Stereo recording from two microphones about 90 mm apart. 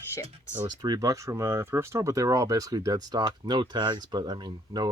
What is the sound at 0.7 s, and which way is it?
Speech, 50° right (ahead or behind).